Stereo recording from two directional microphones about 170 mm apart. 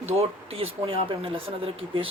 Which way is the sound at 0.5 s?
35° right (ahead or behind).